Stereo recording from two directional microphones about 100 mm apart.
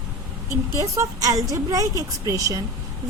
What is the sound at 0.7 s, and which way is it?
A woman's voice, 30° right (ahead or behind).